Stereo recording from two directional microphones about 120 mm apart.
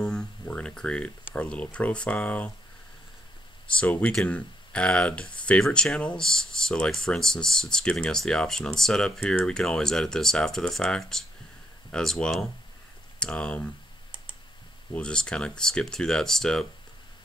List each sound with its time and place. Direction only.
0.0 s speech: 5° left (ahead or behind)
3.7 s speech: 10° left (ahead or behind)
15.0 s speech: 10° left (ahead or behind)